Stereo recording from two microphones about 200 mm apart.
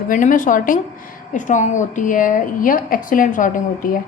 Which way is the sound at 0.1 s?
40° left (ahead or behind).